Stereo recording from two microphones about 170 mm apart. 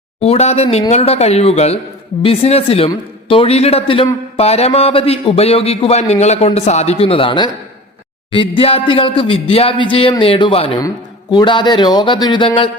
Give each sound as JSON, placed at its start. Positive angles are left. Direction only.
{"t": 0.2, "sound": "a man's voice", "side_deg": 40}